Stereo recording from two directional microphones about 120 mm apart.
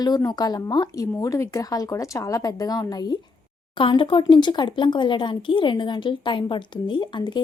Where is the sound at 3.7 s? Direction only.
45° left (ahead or behind).